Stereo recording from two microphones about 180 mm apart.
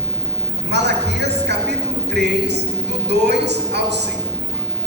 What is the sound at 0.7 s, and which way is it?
A woman's voice, 70° right (ahead or behind).